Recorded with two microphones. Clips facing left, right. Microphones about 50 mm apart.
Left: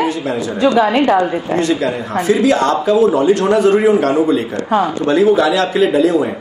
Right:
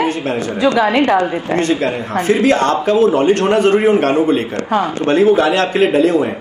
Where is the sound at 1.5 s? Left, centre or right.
Right.